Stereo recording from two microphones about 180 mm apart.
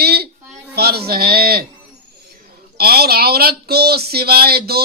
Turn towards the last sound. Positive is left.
turn(degrees=-60)  # may be behind; listen again after turning